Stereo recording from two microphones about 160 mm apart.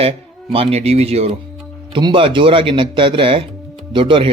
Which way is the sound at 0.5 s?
40° right (ahead or behind).